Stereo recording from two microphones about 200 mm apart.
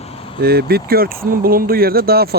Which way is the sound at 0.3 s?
50° right (ahead or behind).